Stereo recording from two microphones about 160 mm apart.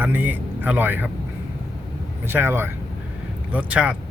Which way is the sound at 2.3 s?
15° right (ahead or behind).